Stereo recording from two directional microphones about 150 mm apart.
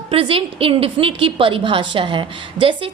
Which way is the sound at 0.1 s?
40° right (ahead or behind).